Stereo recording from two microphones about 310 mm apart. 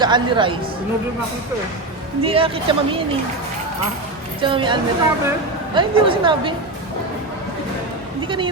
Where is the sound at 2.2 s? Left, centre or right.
Centre.